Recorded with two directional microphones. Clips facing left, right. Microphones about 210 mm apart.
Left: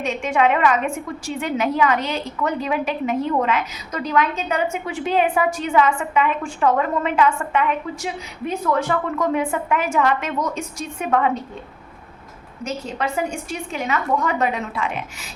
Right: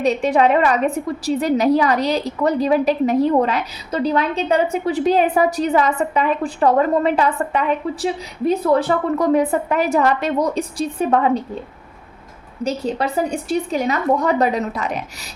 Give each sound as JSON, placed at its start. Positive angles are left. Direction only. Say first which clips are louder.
{"t": 0.0, "sound": "a woman's voice", "louder": "right 4 dB", "side_deg": -35}
{"t": 12.6, "sound": "a woman's voice", "louder": "right 5 dB", "side_deg": -35}